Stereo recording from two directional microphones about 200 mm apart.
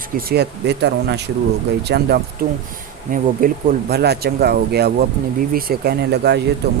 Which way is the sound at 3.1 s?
45° right (ahead or behind).